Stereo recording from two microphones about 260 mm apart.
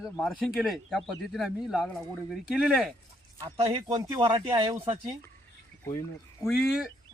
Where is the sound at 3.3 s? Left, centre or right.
Centre.